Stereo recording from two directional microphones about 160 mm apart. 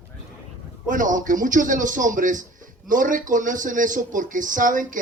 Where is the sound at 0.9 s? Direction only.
55° right (ahead or behind).